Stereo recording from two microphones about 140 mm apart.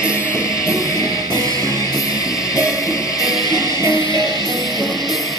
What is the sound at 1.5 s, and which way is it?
Music, 25° right (ahead or behind).